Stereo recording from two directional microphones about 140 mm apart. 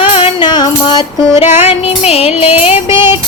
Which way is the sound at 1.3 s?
55° left (ahead or behind).